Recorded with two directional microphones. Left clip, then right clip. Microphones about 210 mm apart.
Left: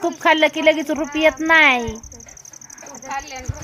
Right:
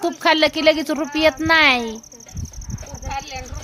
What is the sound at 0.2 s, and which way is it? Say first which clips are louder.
Speech: left 1 dB; 5° right (ahead or behind).